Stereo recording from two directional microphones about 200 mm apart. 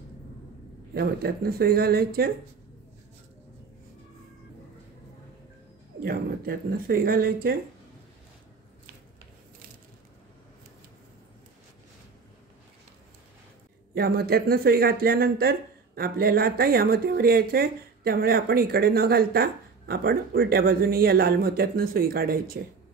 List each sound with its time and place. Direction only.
0.9 s speech: 50° right (ahead or behind)
6.0 s speech: 50° right (ahead or behind)
13.9 s speech: 50° right (ahead or behind)